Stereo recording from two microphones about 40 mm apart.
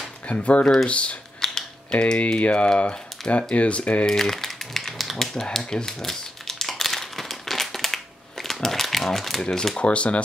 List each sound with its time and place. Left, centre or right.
0.3 s speech: left
1.4 s typing: centre
1.9 s speech: left
4.0 s speech: centre
5.8 s crumpling: centre
9.8 s speech: left